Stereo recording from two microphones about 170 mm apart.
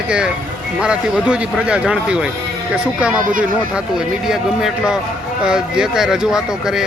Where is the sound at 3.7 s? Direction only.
5° right (ahead or behind).